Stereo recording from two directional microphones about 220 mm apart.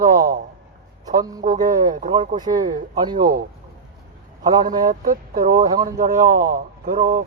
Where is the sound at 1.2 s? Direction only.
15° right (ahead or behind).